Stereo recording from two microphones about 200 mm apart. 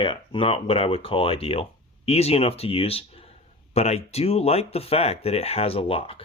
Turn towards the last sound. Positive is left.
turn(degrees=30)  # may be behind; listen again after turning